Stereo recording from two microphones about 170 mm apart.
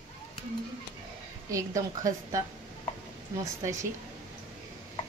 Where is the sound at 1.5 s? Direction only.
20° right (ahead or behind).